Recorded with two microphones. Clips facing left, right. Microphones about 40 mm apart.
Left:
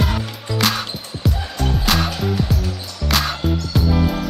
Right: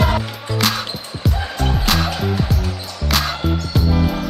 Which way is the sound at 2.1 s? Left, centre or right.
Centre.